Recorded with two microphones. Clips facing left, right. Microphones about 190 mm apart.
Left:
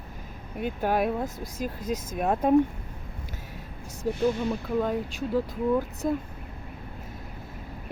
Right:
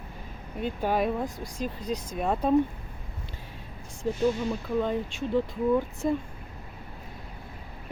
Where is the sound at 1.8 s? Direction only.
45° left (ahead or behind).